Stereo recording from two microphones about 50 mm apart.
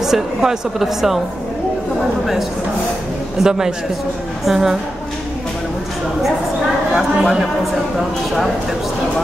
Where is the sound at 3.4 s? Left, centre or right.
Centre.